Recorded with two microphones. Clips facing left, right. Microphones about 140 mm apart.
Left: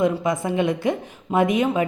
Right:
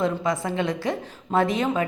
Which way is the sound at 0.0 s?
15° left (ahead or behind).